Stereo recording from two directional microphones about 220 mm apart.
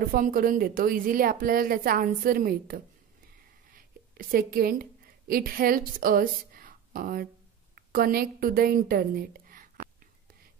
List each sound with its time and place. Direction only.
0.1 s a woman's voice: 40° right (ahead or behind)
3.7 s a sound: 40° right (ahead or behind)
5.3 s a woman's voice: 40° right (ahead or behind)